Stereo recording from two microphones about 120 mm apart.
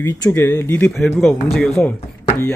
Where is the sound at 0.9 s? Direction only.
Centre (ahead or behind).